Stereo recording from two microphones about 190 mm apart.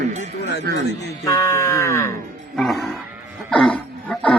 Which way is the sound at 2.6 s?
Centre (ahead or behind).